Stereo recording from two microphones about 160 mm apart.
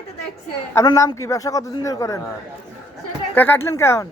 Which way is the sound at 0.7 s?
20° left (ahead or behind).